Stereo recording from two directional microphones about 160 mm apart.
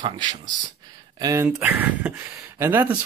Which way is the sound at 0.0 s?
30° right (ahead or behind).